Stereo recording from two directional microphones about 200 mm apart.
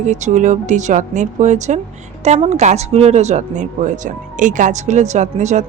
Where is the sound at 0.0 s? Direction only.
35° right (ahead or behind).